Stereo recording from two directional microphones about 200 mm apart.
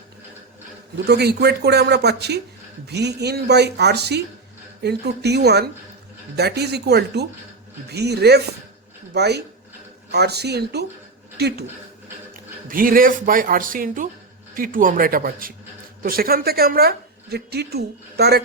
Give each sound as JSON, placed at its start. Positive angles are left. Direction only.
{"t": 1.0, "sound": "a woman's voice", "side_deg": -55}